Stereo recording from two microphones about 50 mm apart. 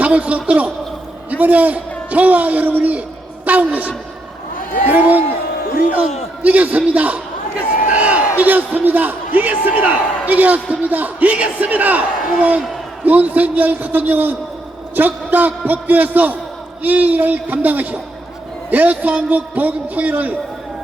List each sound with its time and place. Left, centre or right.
0.0 s a man's voice: right
4.9 s a man's voice: right
6.4 s a man's voice: right